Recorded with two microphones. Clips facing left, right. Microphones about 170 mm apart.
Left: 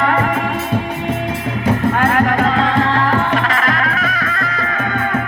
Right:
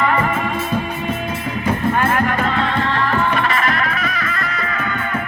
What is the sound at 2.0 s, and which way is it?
Music, 90° left.